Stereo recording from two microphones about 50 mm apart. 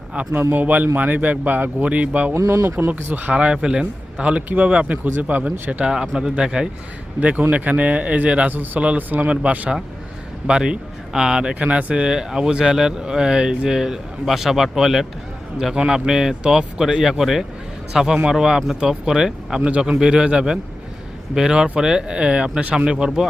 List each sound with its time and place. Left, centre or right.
0.5 s speech: right
1.8 s a man's voice: right
2.3 s speech: right
2.9 s speech: right
3.4 s a man's voice: centre
5.0 s speech: right
5.8 s speech: centre
7.2 s a man's voice: right; by 11.5 s centre
11.6 s a man's voice: right
12.0 s speech: centre